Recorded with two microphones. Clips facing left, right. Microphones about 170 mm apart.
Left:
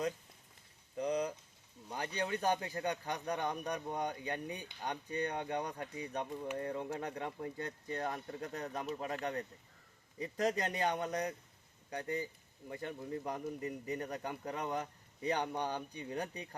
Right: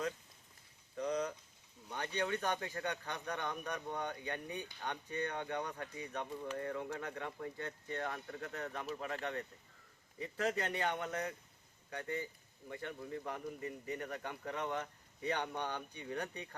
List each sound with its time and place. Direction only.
0.9 s a sound: 35° left (ahead or behind)
1.9 s speech: 35° left (ahead or behind)
2.8 s speech: 10° left (ahead or behind)
3.1 s speech: 35° left (ahead or behind)
6.3 s speech: 20° left (ahead or behind); by 16.5 s 35° left (ahead or behind)